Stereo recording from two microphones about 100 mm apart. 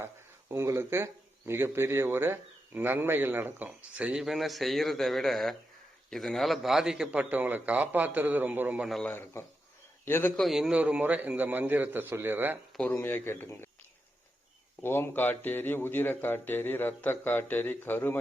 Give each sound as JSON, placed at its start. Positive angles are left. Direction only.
{"t": 0.0, "sound": "speech", "side_deg": -25}
{"t": 3.9, "sound": "a man's voice", "side_deg": -10}
{"t": 9.0, "sound": "speech", "side_deg": 20}
{"t": 10.3, "sound": "a man's voice", "side_deg": 0}
{"t": 12.9, "sound": "speech", "side_deg": 20}
{"t": 14.8, "sound": "speech", "side_deg": 25}